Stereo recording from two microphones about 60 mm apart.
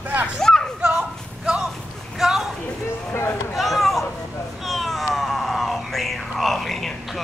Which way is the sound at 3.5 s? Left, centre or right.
Centre.